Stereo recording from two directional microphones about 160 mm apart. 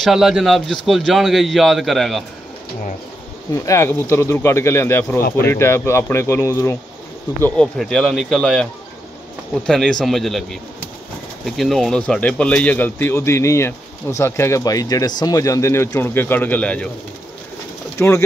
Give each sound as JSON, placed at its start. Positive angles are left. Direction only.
{"t": 0.0, "sound": "a man's voice", "side_deg": 0}
{"t": 3.5, "sound": "a man's voice", "side_deg": 20}
{"t": 17.9, "sound": "speech", "side_deg": 15}